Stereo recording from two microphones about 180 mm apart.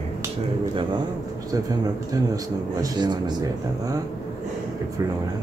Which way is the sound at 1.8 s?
20° right (ahead or behind).